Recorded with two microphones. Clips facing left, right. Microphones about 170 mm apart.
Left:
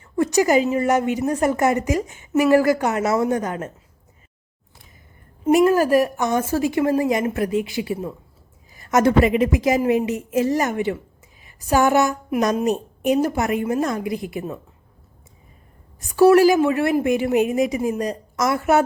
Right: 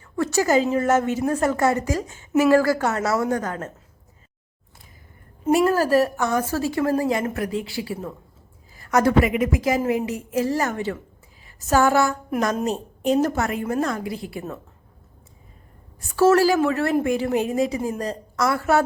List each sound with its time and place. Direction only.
0.0 s a woman's voice: 15° left (ahead or behind)
5.5 s a woman's voice: 15° left (ahead or behind)
11.4 s a sound: 15° left (ahead or behind)
12.4 s a woman's voice: 15° left (ahead or behind)
16.0 s a woman's voice: 15° left (ahead or behind)